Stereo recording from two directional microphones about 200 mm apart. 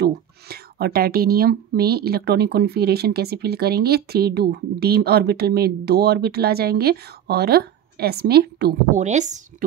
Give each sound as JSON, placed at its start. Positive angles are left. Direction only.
{"t": 0.0, "sound": "speech", "side_deg": -50}
{"t": 8.9, "sound": "a woman's voice", "side_deg": -35}